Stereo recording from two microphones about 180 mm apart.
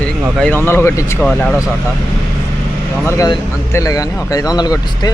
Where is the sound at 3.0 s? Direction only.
15° left (ahead or behind).